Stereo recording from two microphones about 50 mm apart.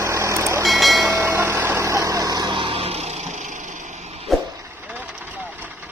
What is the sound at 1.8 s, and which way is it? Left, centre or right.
Vehicle, right.